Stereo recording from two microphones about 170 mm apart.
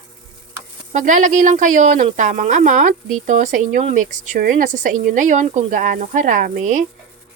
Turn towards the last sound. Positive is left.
turn(degrees=-45)  # may be behind; listen again after turning